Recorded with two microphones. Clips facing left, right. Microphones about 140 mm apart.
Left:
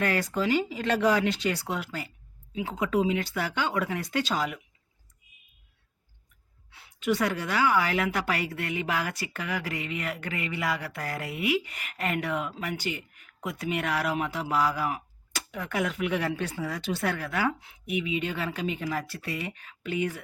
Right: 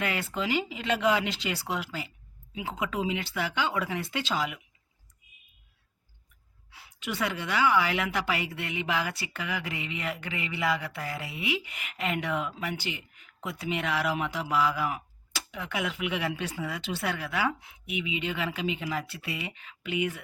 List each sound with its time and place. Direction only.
0.0 s a woman's voice: 45° left (ahead or behind)
6.7 s a woman's voice: 40° left (ahead or behind)